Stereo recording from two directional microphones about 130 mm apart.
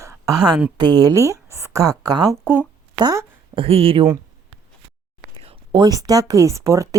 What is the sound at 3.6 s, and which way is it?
Speech, 50° right (ahead or behind).